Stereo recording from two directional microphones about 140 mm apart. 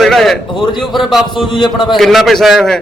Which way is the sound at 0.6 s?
35° left (ahead or behind).